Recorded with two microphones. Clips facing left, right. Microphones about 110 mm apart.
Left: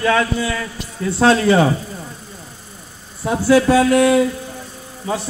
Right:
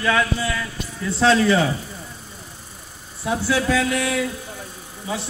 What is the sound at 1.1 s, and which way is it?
Speech, 45° left (ahead or behind).